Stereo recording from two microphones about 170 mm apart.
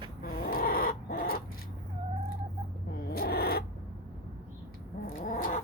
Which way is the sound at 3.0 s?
65° left (ahead or behind).